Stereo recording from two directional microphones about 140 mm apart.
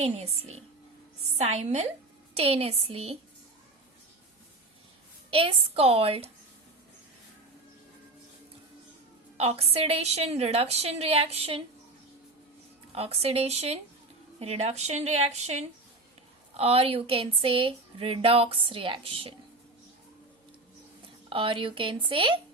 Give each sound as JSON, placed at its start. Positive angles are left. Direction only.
{"t": 0.0, "sound": "a woman's voice", "side_deg": -50}
{"t": 5.3, "sound": "a woman's voice", "side_deg": -40}
{"t": 9.4, "sound": "a woman's voice", "side_deg": -45}
{"t": 12.9, "sound": "a woman's voice", "side_deg": -45}
{"t": 21.2, "sound": "speech", "side_deg": -40}